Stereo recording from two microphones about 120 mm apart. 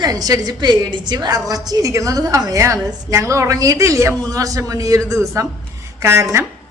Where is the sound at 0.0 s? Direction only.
30° right (ahead or behind).